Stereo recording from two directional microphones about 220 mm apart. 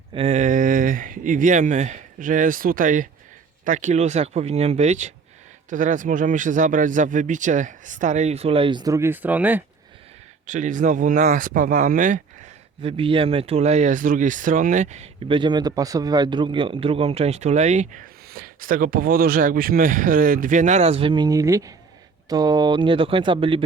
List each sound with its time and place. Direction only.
0.1 s speech: 30° right (ahead or behind); by 9.6 s 5° right (ahead or behind)
10.4 s speech: 35° right (ahead or behind)